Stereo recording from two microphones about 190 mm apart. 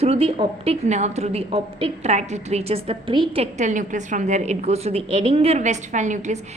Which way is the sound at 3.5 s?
40° right (ahead or behind).